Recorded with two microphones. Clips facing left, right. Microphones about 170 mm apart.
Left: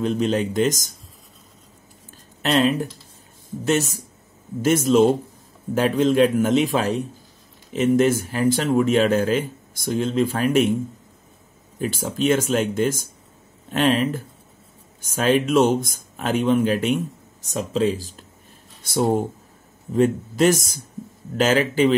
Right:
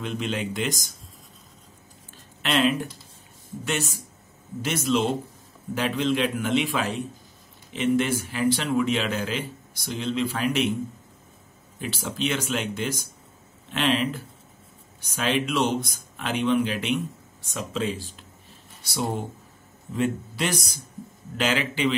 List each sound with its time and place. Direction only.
0.0 s a man's voice: 40° left (ahead or behind)
2.4 s a man's voice: 40° left (ahead or behind)
11.8 s a man's voice: 45° left (ahead or behind)